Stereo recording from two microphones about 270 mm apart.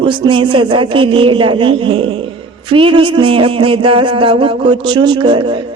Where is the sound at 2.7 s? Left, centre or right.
Centre.